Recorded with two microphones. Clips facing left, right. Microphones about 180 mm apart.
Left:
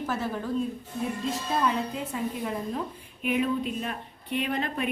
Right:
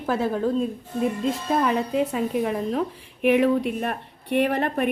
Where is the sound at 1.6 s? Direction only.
65° right (ahead or behind).